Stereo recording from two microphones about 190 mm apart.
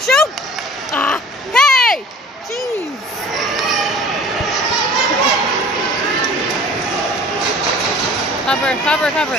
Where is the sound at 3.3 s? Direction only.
Centre (ahead or behind).